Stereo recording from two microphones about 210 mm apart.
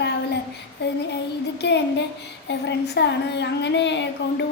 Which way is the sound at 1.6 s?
55° left (ahead or behind).